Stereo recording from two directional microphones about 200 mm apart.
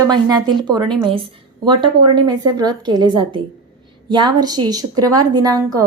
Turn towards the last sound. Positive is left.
turn(degrees=-20)  # may be behind; listen again after turning